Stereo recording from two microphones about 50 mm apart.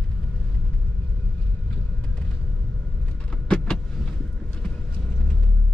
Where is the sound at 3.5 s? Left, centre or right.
Left.